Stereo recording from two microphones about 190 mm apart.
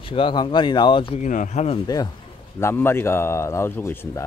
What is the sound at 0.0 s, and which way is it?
Speech, 25° left (ahead or behind).